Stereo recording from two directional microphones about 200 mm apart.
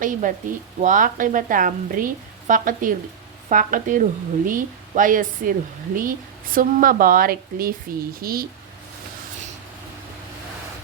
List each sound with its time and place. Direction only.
0.0 s speech: 40° right (ahead or behind)